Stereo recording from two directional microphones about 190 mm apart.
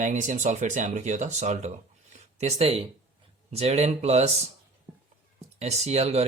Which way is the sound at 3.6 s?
35° right (ahead or behind).